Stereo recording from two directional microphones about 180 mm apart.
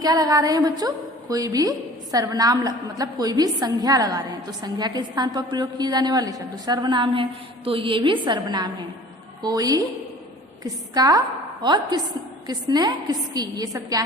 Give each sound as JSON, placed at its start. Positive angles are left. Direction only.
{"t": 0.0, "sound": "a woman's voice", "side_deg": -20}